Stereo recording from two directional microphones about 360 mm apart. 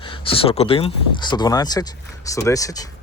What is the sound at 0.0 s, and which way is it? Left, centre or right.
Speech, centre.